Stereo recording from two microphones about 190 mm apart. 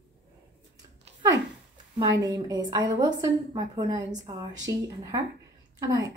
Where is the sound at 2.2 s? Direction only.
20° right (ahead or behind).